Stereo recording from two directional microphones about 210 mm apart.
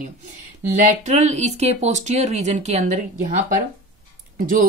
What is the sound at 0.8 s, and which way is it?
Speech, 35° right (ahead or behind).